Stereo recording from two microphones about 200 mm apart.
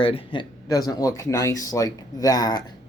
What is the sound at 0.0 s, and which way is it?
Speech, 25° left (ahead or behind).